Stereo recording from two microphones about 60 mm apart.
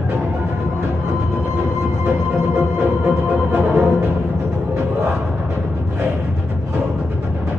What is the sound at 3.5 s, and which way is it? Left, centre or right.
Music, right.